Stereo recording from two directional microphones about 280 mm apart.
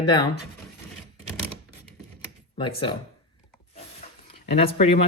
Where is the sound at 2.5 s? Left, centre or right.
Centre.